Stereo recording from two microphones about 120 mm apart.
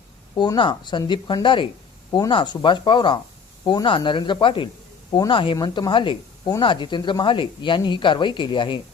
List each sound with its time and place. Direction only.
0.3 s speech: 40° left (ahead or behind)